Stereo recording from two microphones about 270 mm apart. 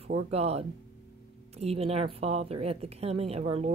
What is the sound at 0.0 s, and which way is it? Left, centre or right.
Speech, right.